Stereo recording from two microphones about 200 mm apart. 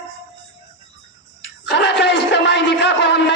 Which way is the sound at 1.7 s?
60° left (ahead or behind).